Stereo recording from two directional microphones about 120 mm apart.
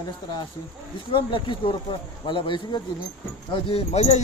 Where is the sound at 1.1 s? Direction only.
45° left (ahead or behind).